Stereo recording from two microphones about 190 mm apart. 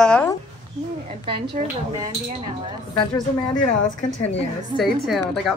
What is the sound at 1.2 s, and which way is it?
Speech, 25° right (ahead or behind).